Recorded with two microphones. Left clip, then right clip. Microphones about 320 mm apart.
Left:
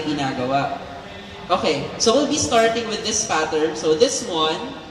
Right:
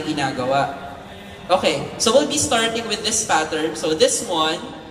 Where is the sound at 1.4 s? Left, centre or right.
Right.